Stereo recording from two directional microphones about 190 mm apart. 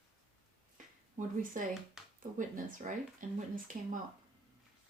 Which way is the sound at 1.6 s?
45° right (ahead or behind).